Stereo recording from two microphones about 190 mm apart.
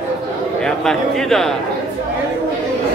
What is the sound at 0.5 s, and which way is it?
Speech, 5° left (ahead or behind).